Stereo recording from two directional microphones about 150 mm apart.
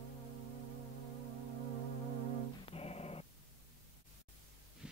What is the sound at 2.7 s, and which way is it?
Music, 40° left (ahead or behind).